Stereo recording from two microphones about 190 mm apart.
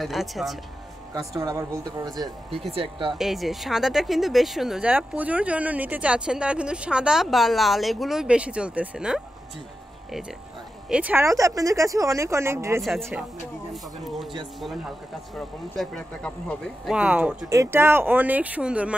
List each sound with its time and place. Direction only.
0.0 s speech: centre (ahead or behind)
1.1 s speech: 20° right (ahead or behind)
3.2 s speech: centre (ahead or behind)
10.9 s speech: 5° right (ahead or behind)
12.8 s speech: centre (ahead or behind)
15.7 s speech: centre (ahead or behind)